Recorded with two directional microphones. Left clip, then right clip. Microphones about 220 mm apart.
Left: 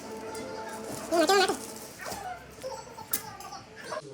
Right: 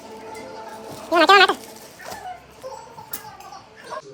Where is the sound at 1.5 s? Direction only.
Centre (ahead or behind).